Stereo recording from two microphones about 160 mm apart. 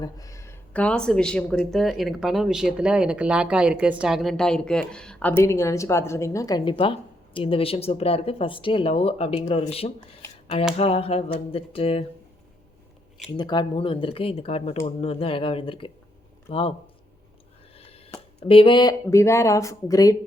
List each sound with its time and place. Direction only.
0.0 s speech: 20° left (ahead or behind)
0.7 s speech: 5° left (ahead or behind); by 12.0 s 35° left (ahead or behind)
13.3 s speech: 25° left (ahead or behind)
18.3 s speech: 35° left (ahead or behind)